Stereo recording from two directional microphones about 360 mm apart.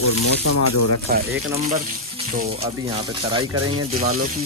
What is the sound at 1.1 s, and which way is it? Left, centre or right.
Speech, right.